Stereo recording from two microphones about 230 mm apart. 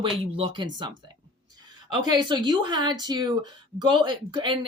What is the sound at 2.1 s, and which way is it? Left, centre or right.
Speech, centre.